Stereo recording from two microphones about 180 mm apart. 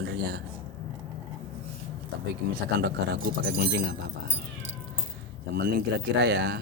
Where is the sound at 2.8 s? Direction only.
55° right (ahead or behind).